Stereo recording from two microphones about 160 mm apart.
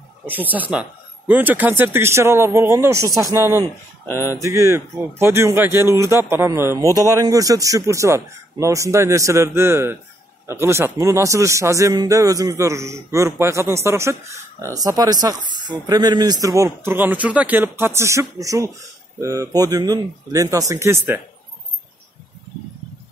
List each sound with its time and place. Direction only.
0.3 s speech: 10° right (ahead or behind)